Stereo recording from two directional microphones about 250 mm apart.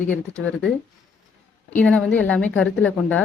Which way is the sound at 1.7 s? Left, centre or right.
Centre.